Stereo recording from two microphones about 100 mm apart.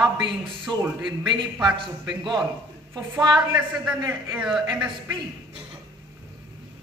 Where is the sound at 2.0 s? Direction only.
45° right (ahead or behind).